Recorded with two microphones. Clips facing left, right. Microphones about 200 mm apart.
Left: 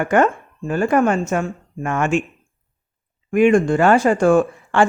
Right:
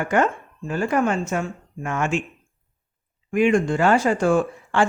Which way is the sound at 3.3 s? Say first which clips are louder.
Left 5 dB; 50° left (ahead or behind).